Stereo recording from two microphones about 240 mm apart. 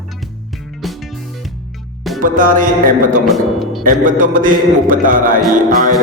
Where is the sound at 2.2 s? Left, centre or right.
Right.